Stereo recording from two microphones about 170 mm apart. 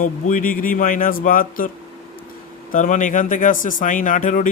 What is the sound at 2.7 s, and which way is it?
Speech, 50° left (ahead or behind).